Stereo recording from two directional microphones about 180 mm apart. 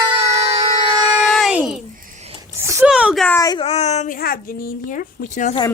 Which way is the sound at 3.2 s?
15° left (ahead or behind).